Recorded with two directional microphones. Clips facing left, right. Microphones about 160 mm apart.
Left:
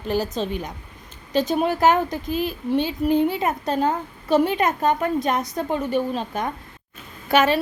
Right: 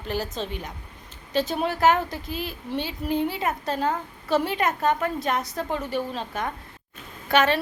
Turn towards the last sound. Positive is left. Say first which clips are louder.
# left 3 dB
turn(degrees=10)  # may be behind; listen again after turning